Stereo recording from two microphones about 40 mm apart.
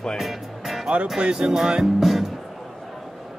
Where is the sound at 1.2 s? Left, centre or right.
Centre.